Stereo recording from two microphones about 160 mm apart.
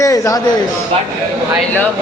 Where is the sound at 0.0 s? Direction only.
20° left (ahead or behind).